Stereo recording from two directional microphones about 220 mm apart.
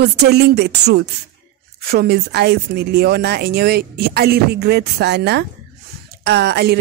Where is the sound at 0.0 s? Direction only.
45° right (ahead or behind).